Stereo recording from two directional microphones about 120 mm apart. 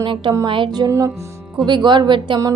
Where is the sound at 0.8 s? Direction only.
25° right (ahead or behind).